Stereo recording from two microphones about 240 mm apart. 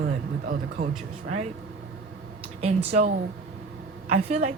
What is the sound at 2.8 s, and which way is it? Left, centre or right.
Speech, right.